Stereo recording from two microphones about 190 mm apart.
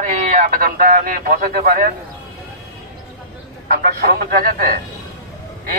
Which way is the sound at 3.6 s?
55° right (ahead or behind).